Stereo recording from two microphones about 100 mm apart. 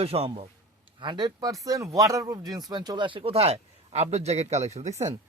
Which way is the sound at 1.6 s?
35° right (ahead or behind).